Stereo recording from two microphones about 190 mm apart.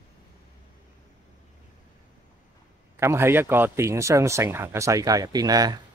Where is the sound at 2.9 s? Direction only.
15° right (ahead or behind).